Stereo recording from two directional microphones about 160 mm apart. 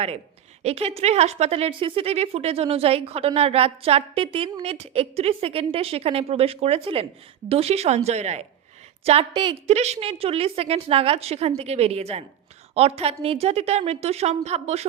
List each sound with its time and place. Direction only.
0.6 s a woman's voice: 40° right (ahead or behind)
9.0 s a woman's voice: 35° right (ahead or behind)
9.6 s a woman's voice: 45° right (ahead or behind)